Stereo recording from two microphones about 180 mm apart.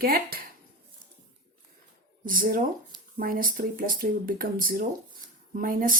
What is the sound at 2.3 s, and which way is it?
Speech, 50° right (ahead or behind).